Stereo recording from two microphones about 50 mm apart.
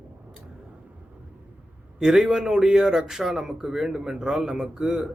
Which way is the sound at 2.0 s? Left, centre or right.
Centre.